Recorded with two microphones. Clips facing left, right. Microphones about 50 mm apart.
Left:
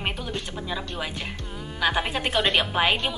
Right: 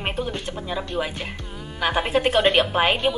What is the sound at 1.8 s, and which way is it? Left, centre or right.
Speech, centre.